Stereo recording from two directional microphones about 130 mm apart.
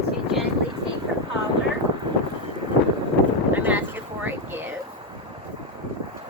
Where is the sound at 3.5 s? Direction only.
15° right (ahead or behind).